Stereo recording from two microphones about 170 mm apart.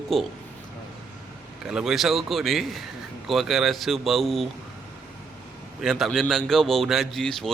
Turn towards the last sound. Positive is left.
turn(degrees=0)  # may be behind; listen again after turning